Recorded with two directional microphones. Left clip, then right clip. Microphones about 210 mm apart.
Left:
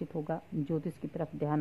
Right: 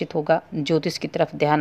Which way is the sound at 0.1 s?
25° right (ahead or behind).